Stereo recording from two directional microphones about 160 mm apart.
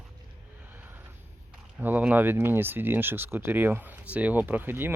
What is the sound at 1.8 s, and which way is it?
Speech, 10° right (ahead or behind).